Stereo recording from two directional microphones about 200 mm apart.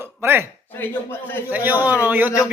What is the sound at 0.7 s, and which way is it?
Speech, 10° left (ahead or behind).